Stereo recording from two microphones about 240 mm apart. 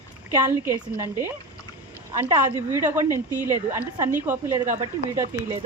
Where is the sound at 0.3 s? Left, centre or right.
Centre.